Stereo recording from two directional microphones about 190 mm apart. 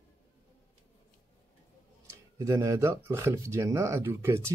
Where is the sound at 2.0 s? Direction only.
15° right (ahead or behind).